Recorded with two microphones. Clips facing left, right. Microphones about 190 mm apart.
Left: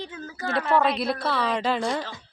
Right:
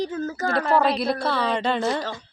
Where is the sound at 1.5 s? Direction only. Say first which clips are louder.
Right 2 dB; 5° left (ahead or behind).